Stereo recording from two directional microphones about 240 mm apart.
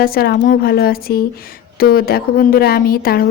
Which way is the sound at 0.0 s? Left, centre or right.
Left.